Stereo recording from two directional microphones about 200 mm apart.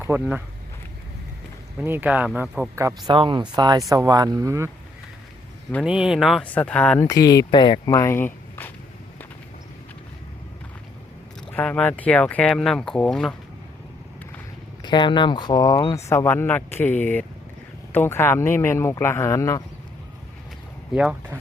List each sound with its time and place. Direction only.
0.0 s speech: 10° right (ahead or behind)
1.8 s speech: 10° right (ahead or behind)
3.1 s speech: 25° right (ahead or behind)
5.8 s speech: 5° right (ahead or behind)
7.0 s speech: 15° left (ahead or behind)
8.0 s a sound: 10° left (ahead or behind)
11.5 s speech: 10° left (ahead or behind)
14.8 s speech: 20° left (ahead or behind)
20.9 s speech: 5° right (ahead or behind)